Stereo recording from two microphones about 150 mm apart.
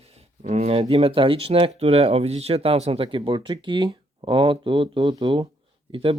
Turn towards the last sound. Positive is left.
turn(degrees=-35)  # may be behind; listen again after turning